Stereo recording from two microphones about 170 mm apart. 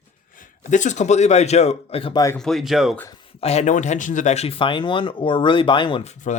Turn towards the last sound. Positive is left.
turn(degrees=45)  # may be behind; listen again after turning